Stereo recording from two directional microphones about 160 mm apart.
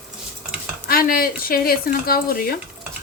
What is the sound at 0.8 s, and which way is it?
Speech, 65° left (ahead or behind).